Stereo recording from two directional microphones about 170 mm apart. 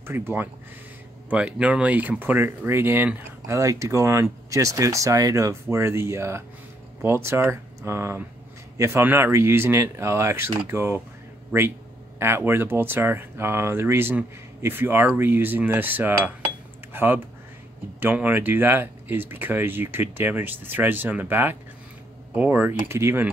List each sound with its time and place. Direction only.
0.0 s speech: 15° right (ahead or behind)
12.2 s speech: 15° right (ahead or behind)